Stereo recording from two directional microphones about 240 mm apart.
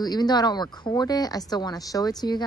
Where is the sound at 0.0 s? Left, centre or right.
Centre.